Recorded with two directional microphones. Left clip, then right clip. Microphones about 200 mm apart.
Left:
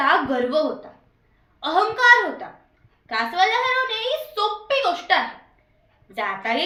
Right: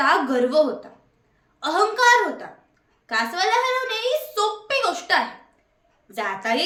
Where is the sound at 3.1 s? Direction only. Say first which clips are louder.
Left 1 dB; 20° right (ahead or behind).